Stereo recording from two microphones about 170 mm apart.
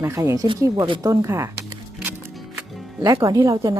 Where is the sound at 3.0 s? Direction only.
20° right (ahead or behind).